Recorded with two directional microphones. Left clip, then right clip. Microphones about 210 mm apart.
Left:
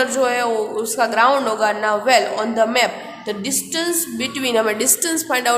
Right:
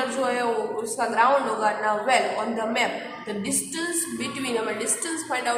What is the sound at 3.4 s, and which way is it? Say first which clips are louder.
A woman's voice: left 8 dB; 40° left (ahead or behind).